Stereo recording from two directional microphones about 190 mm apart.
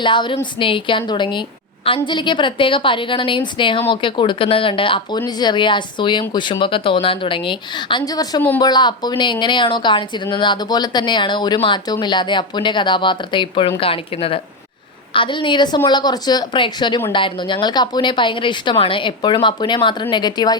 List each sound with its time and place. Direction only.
0.0 s a woman's voice: 25° left (ahead or behind)